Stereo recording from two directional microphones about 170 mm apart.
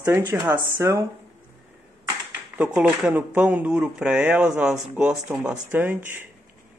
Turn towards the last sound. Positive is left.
turn(degrees=-10)  # may be behind; listen again after turning